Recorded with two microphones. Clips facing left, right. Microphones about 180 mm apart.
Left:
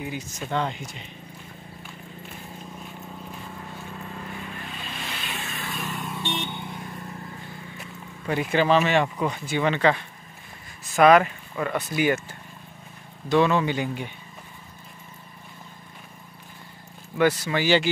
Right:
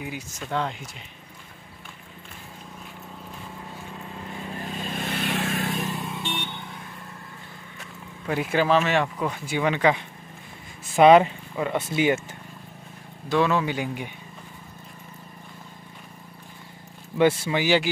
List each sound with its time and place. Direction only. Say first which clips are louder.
0.5 s speech: left 1 dB; centre (ahead or behind)
4.1 s vehicle: right 1 dB; 25° right (ahead or behind); by 5.7 s 45° right (ahead or behind)
5.8 s vehicle: right 3 dB; 35° right (ahead or behind)
6.1 s vehicle: left 2 dB; centre (ahead or behind)
8.3 s speech: left 1 dB; centre (ahead or behind)
9.5 s speech: even; 10° right (ahead or behind)
11.0 s speech: right 2 dB; 25° right (ahead or behind)
13.3 s speech: left 2 dB; centre (ahead or behind)
17.2 s speech: right 1 dB; 25° right (ahead or behind)